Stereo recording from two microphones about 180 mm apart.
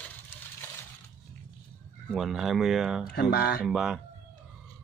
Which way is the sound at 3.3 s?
60° left (ahead or behind).